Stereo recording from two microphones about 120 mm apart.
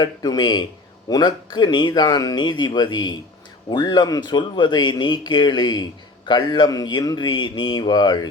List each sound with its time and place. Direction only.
0.0 s speech: 35° left (ahead or behind)